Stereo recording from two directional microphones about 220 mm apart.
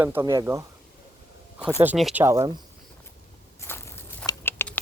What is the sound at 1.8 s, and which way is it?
Speech, 5° right (ahead or behind).